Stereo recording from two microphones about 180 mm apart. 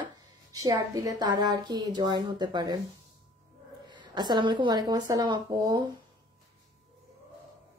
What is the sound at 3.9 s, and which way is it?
Speech, 25° right (ahead or behind).